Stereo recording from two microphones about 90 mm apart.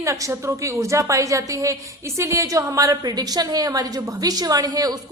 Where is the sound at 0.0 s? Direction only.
35° right (ahead or behind).